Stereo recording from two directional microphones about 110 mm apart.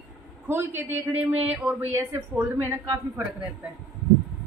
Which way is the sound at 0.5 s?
20° right (ahead or behind).